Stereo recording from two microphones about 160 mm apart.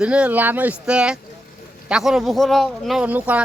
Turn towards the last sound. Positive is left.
turn(degrees=-10)  # may be behind; listen again after turning